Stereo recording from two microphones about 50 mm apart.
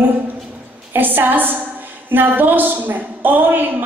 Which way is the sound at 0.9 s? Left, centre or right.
Right.